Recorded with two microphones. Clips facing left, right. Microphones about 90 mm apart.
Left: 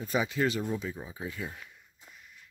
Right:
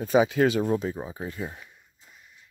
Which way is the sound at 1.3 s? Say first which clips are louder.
Right 4 dB; 30° right (ahead or behind).